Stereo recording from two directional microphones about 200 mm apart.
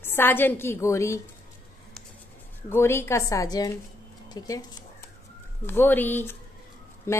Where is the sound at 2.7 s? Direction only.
10° left (ahead or behind).